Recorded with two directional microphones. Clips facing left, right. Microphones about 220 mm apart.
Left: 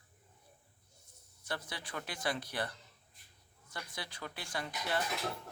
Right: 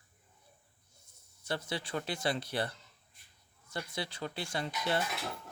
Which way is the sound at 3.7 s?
25° right (ahead or behind).